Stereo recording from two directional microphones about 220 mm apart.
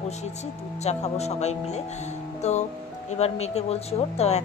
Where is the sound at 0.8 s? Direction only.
30° left (ahead or behind).